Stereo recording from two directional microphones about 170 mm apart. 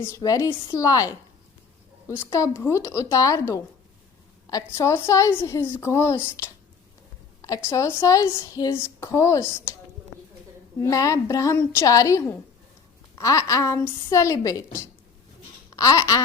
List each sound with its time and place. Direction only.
0.0 s a woman's voice: 20° left (ahead or behind)
2.3 s speech: 15° left (ahead or behind)
10.8 s a woman's voice: 20° left (ahead or behind)
15.7 s a sound: 20° left (ahead or behind)